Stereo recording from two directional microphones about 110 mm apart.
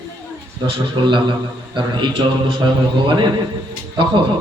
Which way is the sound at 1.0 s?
45° right (ahead or behind).